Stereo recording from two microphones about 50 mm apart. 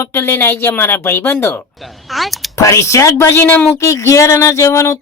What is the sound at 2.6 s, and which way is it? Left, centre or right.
Speech, left.